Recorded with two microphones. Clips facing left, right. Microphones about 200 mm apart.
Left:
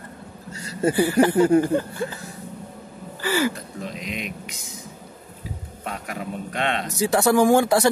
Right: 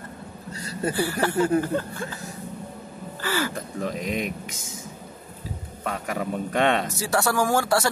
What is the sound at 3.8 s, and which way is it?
Speech, 45° right (ahead or behind).